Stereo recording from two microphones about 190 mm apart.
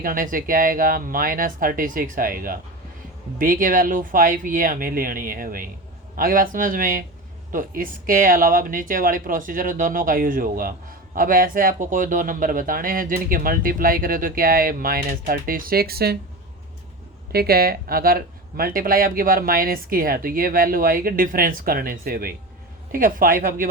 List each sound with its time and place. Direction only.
0.0 s speech: 45° right (ahead or behind)
17.3 s speech: 55° right (ahead or behind)